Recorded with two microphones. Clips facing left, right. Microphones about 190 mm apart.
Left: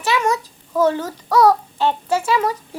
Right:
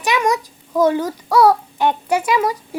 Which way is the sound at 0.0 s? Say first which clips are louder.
Right 1 dB; 15° right (ahead or behind).